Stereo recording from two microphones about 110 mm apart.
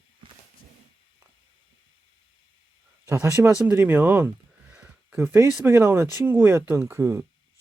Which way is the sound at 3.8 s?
20° right (ahead or behind).